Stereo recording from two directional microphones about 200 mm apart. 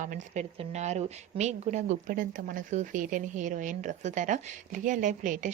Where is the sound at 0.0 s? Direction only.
40° right (ahead or behind).